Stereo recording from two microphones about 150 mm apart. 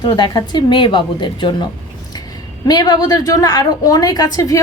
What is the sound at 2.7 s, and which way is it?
A woman's voice, 25° left (ahead or behind).